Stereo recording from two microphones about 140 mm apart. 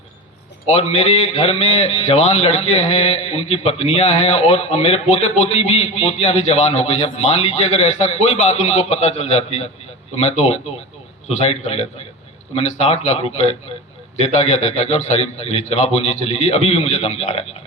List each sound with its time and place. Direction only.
0.7 s a man's voice: 50° left (ahead or behind)